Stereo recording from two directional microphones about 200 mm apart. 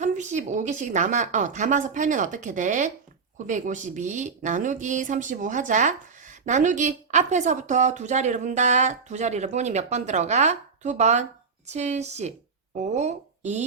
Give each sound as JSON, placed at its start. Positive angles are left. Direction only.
{"t": 0.0, "sound": "a woman's voice", "side_deg": -35}